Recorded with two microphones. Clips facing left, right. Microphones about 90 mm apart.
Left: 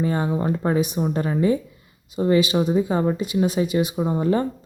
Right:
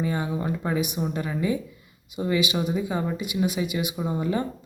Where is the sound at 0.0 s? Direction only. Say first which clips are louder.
Left 5 dB; 35° left (ahead or behind).